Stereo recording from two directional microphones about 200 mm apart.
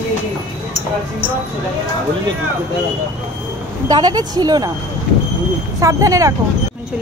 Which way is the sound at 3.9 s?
20° right (ahead or behind).